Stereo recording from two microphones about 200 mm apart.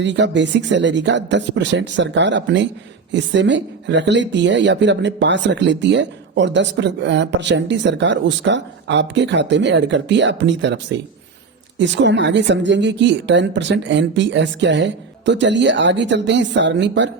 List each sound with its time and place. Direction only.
0.0 s speech: 65° right (ahead or behind)